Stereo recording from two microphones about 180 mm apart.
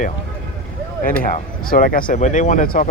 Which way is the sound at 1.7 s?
50° left (ahead or behind).